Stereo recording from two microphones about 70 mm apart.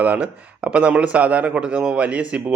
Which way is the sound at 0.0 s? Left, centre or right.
Right.